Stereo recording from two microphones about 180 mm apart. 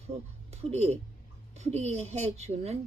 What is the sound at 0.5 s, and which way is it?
A woman's voice, 35° right (ahead or behind).